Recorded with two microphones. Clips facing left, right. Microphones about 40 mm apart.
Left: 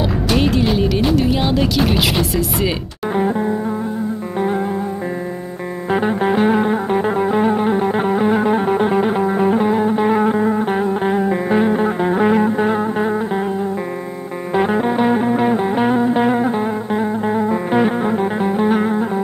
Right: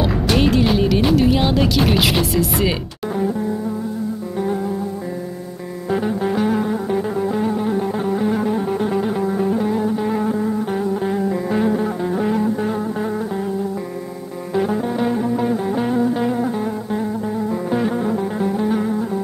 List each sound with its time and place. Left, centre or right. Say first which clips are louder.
0.0 s speech: even; centre
3.2 s music: left 4 dB; left
5.9 s music: left 3 dB; left